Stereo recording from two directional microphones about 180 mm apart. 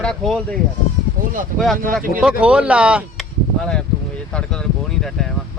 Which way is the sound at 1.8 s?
50° right (ahead or behind).